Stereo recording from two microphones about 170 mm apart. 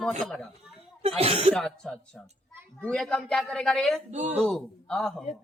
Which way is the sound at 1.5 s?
5° left (ahead or behind).